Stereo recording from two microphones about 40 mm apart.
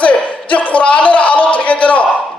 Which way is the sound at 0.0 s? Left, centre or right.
Left.